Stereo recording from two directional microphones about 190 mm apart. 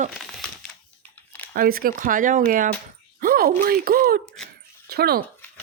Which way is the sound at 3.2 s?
50° right (ahead or behind).